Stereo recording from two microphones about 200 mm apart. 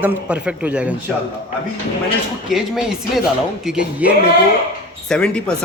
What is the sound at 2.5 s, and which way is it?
A man's voice, centre (ahead or behind).